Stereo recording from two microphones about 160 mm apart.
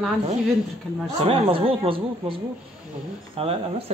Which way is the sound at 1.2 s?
35° right (ahead or behind).